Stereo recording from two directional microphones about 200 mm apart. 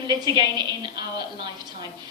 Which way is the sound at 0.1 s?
20° right (ahead or behind).